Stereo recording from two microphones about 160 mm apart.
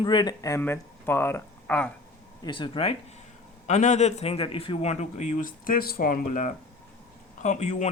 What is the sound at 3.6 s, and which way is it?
A man's voice, 50° left (ahead or behind).